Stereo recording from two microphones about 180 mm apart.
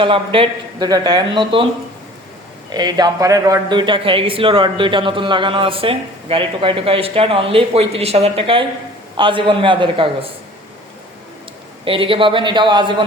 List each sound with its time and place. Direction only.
0.0 s speech: 30° right (ahead or behind)
2.7 s speech: 20° right (ahead or behind)
11.9 s speech: 30° right (ahead or behind)